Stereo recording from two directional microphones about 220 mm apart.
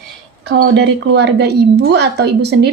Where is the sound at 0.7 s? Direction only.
50° right (ahead or behind).